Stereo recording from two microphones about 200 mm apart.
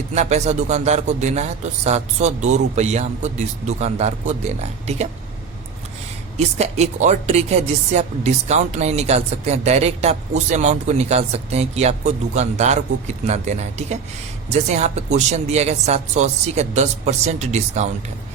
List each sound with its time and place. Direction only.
0.1 s speech: 35° right (ahead or behind)
6.3 s speech: 35° right (ahead or behind)